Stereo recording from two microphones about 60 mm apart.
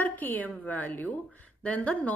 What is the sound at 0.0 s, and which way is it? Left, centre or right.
A woman's voice, left.